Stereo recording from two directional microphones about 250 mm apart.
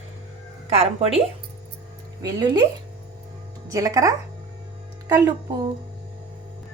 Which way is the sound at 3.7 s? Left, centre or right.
Centre.